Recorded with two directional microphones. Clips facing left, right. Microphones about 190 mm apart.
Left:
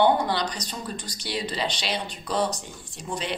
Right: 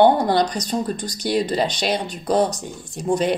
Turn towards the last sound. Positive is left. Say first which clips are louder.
# right 12 dB
turn(degrees=-45)  # may be behind; listen again after turning